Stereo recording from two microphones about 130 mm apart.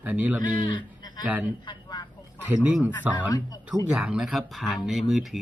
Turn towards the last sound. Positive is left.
turn(degrees=0)  # may be behind; listen again after turning